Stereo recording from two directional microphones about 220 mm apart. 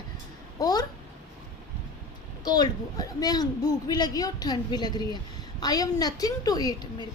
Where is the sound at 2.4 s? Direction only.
15° left (ahead or behind).